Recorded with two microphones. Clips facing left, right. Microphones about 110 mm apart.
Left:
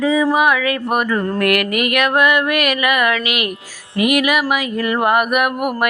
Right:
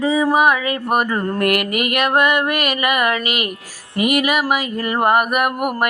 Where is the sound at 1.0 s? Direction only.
20° right (ahead or behind).